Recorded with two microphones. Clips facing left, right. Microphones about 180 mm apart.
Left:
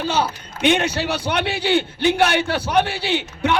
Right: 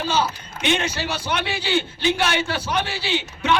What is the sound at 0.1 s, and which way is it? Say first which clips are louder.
A man's voice: left 1 dB; 60° left (ahead or behind).